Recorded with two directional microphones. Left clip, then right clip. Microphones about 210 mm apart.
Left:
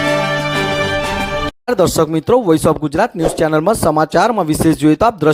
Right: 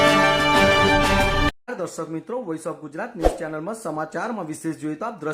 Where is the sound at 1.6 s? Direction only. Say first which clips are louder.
Left 16 dB; 45° left (ahead or behind).